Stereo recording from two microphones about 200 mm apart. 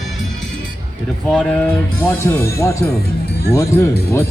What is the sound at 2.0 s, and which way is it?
Speech, 15° left (ahead or behind).